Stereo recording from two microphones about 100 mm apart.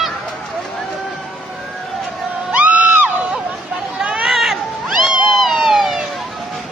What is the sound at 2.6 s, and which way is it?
Music, 15° right (ahead or behind).